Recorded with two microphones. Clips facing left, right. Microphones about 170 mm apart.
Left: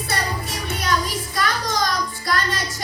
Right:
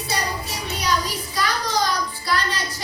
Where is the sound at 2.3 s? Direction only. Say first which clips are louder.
Left 1 dB; 45° left (ahead or behind).